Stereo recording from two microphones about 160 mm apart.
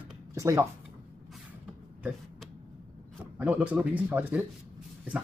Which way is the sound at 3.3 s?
10° right (ahead or behind).